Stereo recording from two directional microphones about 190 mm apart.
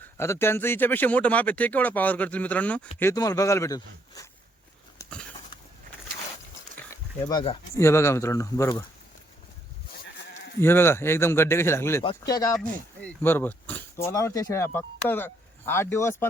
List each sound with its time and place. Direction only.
0.2 s speech: 15° left (ahead or behind)
6.9 s speech: 20° left (ahead or behind)
10.6 s speech: 10° left (ahead or behind)
12.5 s speech: 5° left (ahead or behind)